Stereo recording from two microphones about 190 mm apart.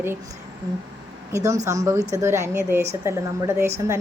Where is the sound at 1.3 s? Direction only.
15° right (ahead or behind).